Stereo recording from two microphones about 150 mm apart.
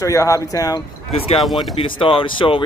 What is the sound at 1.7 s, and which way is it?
Speech, 35° left (ahead or behind).